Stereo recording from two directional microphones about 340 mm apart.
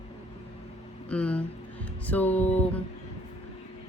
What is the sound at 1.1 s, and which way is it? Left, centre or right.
Speech, centre.